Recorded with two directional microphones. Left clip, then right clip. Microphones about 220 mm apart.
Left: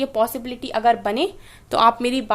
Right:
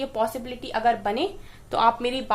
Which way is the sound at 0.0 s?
50° left (ahead or behind).